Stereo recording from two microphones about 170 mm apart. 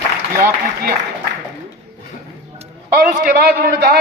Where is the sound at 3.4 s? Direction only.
70° right (ahead or behind).